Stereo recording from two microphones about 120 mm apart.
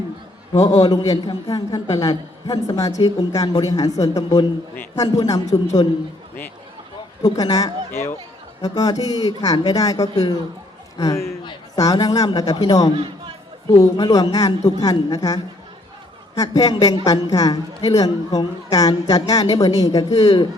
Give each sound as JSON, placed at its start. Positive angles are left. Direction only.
{"t": 0.8, "sound": "a man's voice", "side_deg": 30}
{"t": 5.8, "sound": "a man's voice", "side_deg": 40}
{"t": 7.2, "sound": "a man's voice", "side_deg": 30}
{"t": 7.9, "sound": "a woman's voice", "side_deg": 20}
{"t": 8.6, "sound": "a man's voice", "side_deg": 30}